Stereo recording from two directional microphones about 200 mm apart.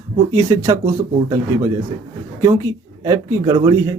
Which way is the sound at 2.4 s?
15° right (ahead or behind).